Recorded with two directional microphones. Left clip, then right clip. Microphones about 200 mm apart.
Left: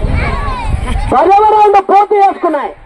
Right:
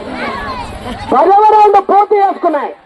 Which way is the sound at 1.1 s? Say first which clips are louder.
Even; 35° left (ahead or behind).